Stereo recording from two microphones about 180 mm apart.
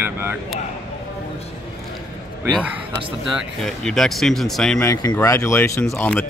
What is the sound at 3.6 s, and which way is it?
Speech, 5° left (ahead or behind).